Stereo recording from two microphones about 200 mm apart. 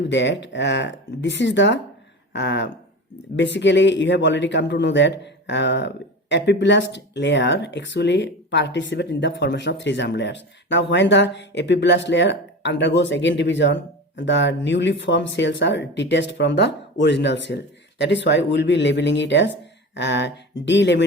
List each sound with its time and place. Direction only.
0.1 s a man's voice: 65° left (ahead or behind)